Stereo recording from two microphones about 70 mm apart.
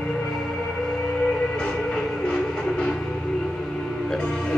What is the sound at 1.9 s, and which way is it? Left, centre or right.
Music, centre.